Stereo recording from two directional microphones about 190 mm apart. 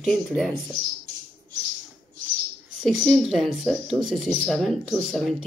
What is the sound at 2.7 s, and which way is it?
Speech, centre (ahead or behind).